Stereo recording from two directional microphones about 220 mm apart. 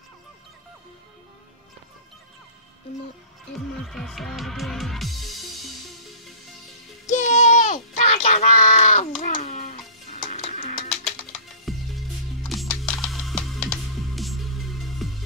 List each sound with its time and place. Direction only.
3.5 s music: centre (ahead or behind)
7.1 s a sound: 35° left (ahead or behind)
9.2 s music: 35° left (ahead or behind)
11.7 s music: centre (ahead or behind)